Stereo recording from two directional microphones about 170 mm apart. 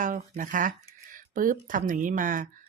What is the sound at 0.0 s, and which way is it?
Speech, 50° right (ahead or behind).